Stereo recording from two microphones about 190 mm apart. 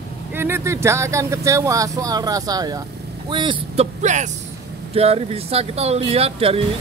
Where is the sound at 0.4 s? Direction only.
15° right (ahead or behind).